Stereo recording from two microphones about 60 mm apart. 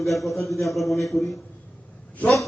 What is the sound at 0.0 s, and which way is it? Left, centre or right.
A man's voice, centre.